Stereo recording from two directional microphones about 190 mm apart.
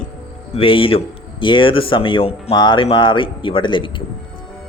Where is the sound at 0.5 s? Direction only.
30° left (ahead or behind).